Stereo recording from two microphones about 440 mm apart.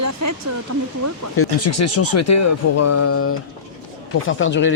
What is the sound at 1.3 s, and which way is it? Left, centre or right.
Speech, left.